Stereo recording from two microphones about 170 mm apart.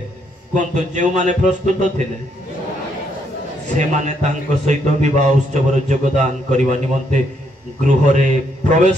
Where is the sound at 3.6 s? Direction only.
45° right (ahead or behind).